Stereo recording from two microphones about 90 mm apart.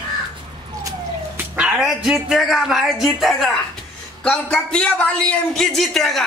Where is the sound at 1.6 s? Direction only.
10° right (ahead or behind).